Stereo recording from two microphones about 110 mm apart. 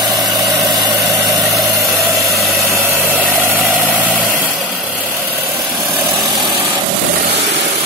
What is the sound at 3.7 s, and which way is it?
Vehicle, 10° right (ahead or behind).